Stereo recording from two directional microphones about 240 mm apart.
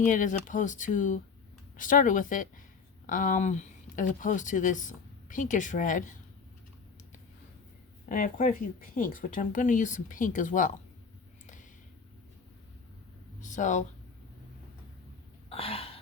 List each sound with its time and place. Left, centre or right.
0.0 s speech: left
8.1 s speech: left
13.4 s speech: left
15.4 s a sound: left